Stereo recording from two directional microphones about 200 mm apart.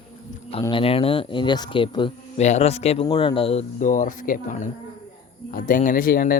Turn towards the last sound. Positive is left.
turn(degrees=45)  # may be behind; listen again after turning